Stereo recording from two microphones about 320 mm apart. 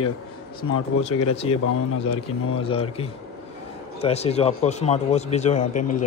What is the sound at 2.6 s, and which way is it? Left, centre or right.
A man's voice, centre.